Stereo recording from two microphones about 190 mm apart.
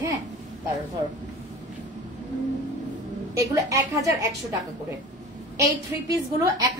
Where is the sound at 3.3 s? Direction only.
15° right (ahead or behind).